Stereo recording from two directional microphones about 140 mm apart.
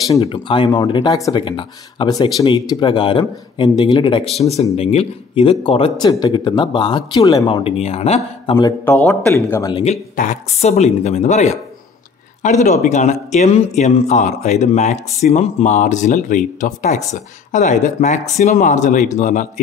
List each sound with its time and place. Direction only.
0.2 s speech: 40° left (ahead or behind)
5.9 s speech: 30° left (ahead or behind)
7.8 s speech: 50° left (ahead or behind)
8.8 s a man's voice: 10° left (ahead or behind)
9.3 s speech: 20° left (ahead or behind)
10.1 s speech: 60° left (ahead or behind)